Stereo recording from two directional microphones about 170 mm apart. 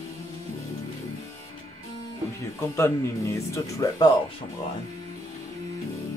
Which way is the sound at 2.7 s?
15° left (ahead or behind).